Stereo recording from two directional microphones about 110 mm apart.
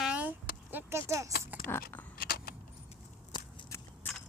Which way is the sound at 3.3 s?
40° left (ahead or behind).